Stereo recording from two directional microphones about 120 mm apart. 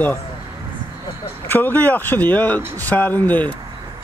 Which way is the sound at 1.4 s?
15° left (ahead or behind).